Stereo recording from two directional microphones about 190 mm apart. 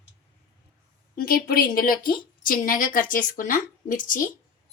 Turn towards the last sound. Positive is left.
turn(degrees=45)  # may be behind; listen again after turning